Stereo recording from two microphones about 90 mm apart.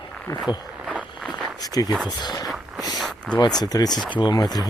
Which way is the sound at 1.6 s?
45° left (ahead or behind).